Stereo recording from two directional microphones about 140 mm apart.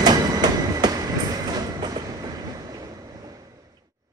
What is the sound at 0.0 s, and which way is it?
Train, 30° right (ahead or behind).